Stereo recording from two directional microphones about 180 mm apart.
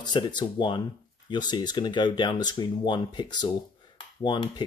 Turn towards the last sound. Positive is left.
turn(degrees=25)  # may be behind; listen again after turning